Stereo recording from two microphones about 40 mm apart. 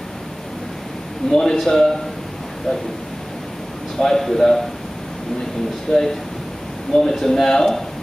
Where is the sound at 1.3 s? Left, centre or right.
Centre.